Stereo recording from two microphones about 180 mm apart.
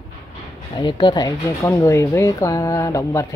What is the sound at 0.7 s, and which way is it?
Speech, 25° left (ahead or behind).